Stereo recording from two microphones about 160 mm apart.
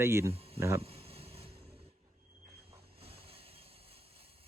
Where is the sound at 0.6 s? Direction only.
15° right (ahead or behind).